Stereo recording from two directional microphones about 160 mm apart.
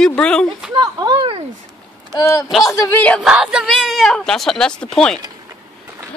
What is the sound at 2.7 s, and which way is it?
Speech, 10° left (ahead or behind).